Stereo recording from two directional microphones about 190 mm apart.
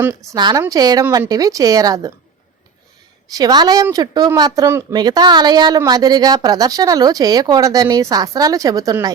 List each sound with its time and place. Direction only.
0.0 s a woman's voice: 15° right (ahead or behind)
3.2 s a woman's voice: 20° right (ahead or behind)